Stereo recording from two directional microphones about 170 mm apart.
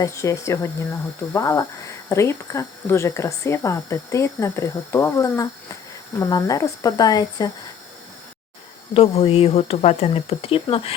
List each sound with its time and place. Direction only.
0.0 s speech: 20° left (ahead or behind)
8.9 s speech: 35° left (ahead or behind)